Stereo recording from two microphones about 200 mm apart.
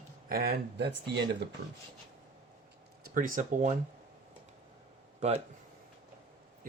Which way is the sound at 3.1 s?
40° right (ahead or behind).